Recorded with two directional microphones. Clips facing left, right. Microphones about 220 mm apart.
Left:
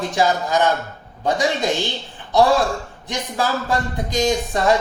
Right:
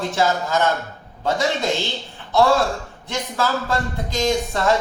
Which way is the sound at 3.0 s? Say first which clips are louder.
Even; 15° left (ahead or behind).